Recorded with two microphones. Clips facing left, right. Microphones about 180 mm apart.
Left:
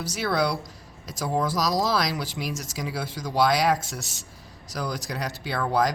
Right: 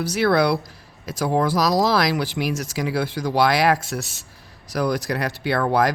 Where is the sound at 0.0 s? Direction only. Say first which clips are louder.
Right 7 dB; 65° right (ahead or behind).